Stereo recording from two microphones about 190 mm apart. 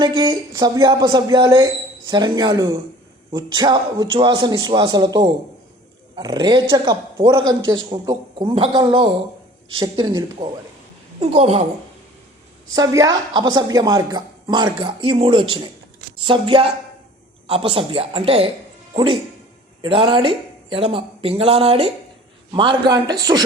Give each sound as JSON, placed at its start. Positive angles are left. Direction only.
{"t": 0.0, "sound": "a woman's voice", "side_deg": -20}
{"t": 11.2, "sound": "a woman's voice", "side_deg": -35}
{"t": 12.7, "sound": "a woman's voice", "side_deg": -20}